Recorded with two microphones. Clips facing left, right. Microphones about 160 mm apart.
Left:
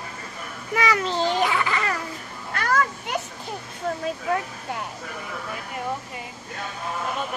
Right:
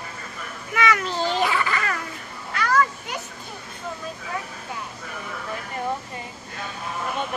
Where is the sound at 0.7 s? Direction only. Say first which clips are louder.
Even; 35° left (ahead or behind).